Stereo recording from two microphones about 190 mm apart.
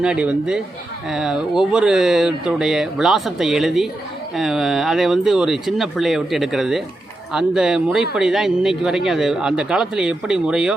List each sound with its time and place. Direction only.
0.0 s speech: 5° right (ahead or behind)